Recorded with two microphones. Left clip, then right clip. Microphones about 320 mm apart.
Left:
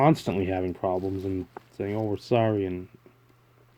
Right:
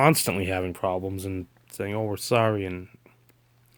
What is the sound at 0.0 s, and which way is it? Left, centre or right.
Speech, right.